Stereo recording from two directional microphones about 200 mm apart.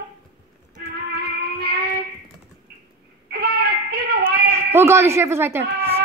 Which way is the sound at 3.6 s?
50° right (ahead or behind).